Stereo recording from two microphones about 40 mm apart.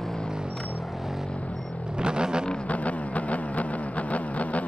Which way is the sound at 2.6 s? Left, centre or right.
Left.